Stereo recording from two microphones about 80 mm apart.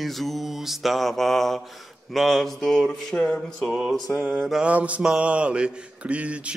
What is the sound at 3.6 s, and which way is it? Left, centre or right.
Music, centre.